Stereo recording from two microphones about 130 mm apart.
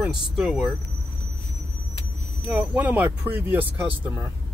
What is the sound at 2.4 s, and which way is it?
Speech, 10° right (ahead or behind).